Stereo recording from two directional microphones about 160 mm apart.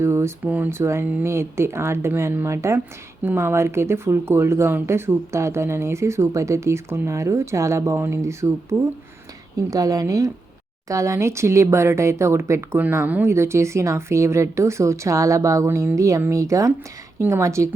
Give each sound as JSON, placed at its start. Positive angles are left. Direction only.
{"t": 0.0, "sound": "speech", "side_deg": -15}
{"t": 9.6, "sound": "speech", "side_deg": -20}